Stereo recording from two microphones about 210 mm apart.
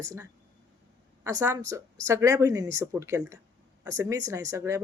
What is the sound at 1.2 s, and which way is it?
Speech, 15° right (ahead or behind).